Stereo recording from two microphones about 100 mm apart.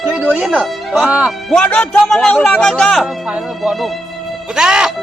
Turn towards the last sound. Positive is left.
turn(degrees=-5)  # may be behind; listen again after turning